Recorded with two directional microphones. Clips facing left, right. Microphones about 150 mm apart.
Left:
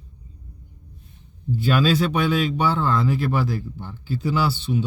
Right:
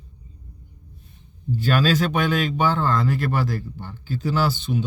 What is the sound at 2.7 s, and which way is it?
Speech, centre (ahead or behind).